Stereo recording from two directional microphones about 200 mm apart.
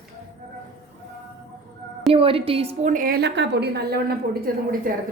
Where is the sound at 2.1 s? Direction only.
25° right (ahead or behind).